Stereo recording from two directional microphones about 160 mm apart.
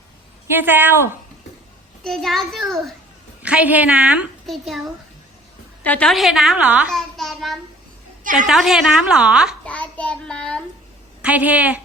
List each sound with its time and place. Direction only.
0.5 s a woman's voice: 10° right (ahead or behind)
2.0 s a child's voice: centre (ahead or behind)
8.2 s a woman's voice: 55° right (ahead or behind)
8.4 s a child's voice: centre (ahead or behind)
9.6 s a child's voice: 10° left (ahead or behind)
11.2 s a woman's voice: 10° right (ahead or behind)